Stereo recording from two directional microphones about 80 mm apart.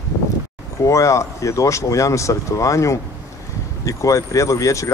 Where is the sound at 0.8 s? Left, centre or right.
Left.